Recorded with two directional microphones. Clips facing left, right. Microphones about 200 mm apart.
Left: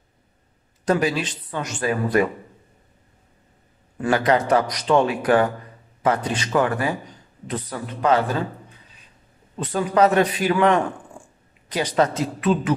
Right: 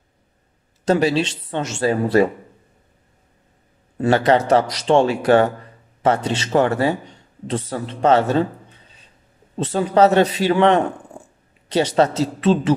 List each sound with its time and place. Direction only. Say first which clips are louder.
0.8 s speech: right 4 dB; 30° right (ahead or behind)
4.0 s speech: right 3 dB; 30° right (ahead or behind)